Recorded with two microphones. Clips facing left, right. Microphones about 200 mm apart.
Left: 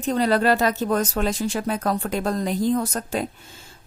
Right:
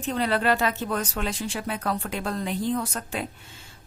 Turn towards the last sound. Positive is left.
turn(degrees=40)  # may be behind; listen again after turning